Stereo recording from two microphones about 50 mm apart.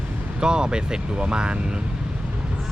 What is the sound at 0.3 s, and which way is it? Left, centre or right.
Speech, centre.